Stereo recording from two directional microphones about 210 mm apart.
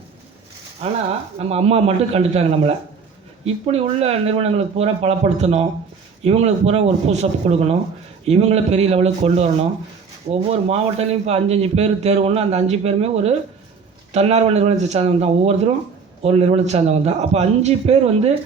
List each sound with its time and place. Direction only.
0.8 s a man's voice: 30° right (ahead or behind)
10.5 s a man's voice: 30° right (ahead or behind)